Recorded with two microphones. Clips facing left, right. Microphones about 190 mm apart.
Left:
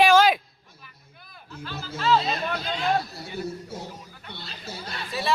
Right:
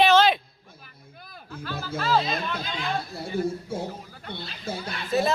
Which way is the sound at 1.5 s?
50° right (ahead or behind).